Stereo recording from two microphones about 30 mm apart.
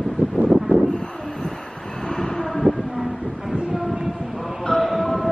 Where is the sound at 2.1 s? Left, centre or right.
Centre.